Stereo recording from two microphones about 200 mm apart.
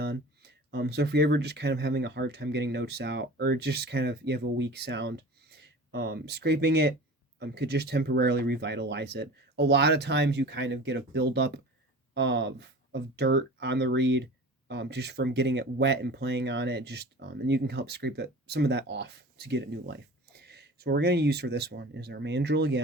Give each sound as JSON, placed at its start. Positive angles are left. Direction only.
{"t": 0.0, "sound": "speech", "side_deg": -55}